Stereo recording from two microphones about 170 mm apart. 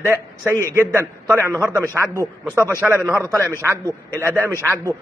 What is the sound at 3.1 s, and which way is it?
A man's voice, 15° right (ahead or behind).